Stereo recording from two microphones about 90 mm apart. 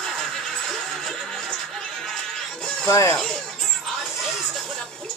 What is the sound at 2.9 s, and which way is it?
Speech, 35° left (ahead or behind).